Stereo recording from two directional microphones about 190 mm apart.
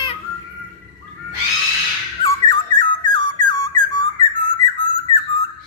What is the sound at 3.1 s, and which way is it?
Whistle, 20° left (ahead or behind).